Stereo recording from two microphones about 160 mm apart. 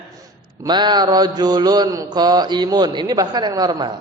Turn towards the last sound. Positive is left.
turn(degrees=-25)  # may be behind; listen again after turning